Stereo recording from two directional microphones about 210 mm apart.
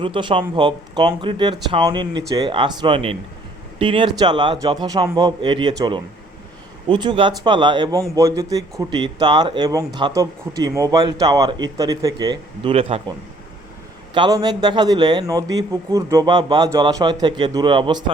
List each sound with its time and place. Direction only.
0.0 s speech: 25° right (ahead or behind)
14.1 s speech: 20° right (ahead or behind)